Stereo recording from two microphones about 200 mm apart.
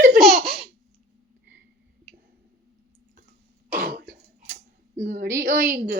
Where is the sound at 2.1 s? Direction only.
Centre (ahead or behind).